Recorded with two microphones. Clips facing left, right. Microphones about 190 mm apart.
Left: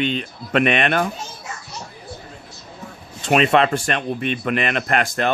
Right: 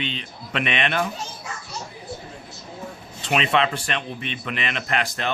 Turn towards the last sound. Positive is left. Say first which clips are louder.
# left 6 dB
turn(degrees=50)  # may be behind; listen again after turning